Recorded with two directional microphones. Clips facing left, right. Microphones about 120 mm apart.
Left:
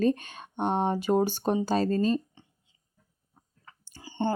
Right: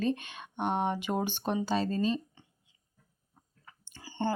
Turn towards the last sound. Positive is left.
turn(degrees=20)  # may be behind; listen again after turning